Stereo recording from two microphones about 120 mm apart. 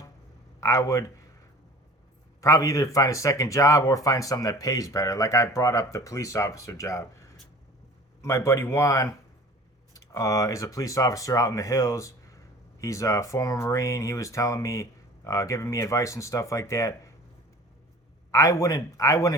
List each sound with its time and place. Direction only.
0.6 s speech: 25° left (ahead or behind)
2.4 s speech: 30° left (ahead or behind)
18.3 s speech: 25° left (ahead or behind)